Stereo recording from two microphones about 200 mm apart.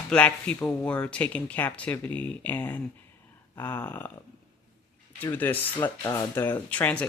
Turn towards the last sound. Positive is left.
turn(degrees=5)  # may be behind; listen again after turning